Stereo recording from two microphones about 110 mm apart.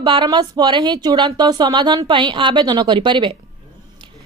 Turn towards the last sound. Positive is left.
turn(degrees=-50)  # may be behind; listen again after turning